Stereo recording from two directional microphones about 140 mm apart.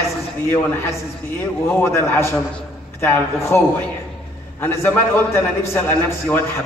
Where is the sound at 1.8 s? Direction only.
15° left (ahead or behind).